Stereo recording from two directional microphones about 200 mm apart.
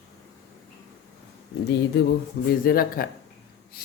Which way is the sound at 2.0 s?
60° left (ahead or behind).